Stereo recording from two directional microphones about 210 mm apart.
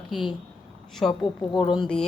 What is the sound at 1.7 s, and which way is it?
Speech, centre (ahead or behind).